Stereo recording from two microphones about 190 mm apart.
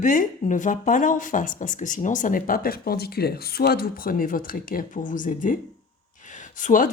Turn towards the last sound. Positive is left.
turn(degrees=45)  # may be behind; listen again after turning